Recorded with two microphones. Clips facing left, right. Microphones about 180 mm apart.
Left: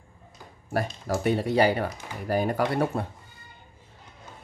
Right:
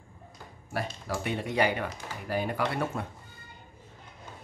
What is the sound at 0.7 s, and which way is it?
Speech, 40° left (ahead or behind).